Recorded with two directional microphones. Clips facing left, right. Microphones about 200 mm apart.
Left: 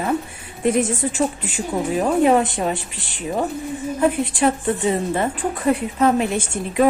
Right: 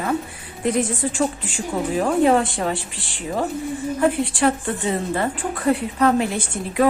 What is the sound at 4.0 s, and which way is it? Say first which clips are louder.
A woman's voice: left 1 dB; 20° left (ahead or behind).